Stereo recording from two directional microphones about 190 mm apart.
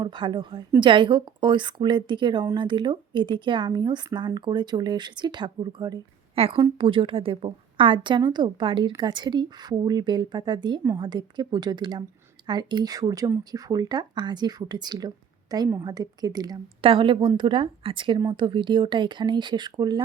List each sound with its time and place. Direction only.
0.0 s speech: 25° right (ahead or behind)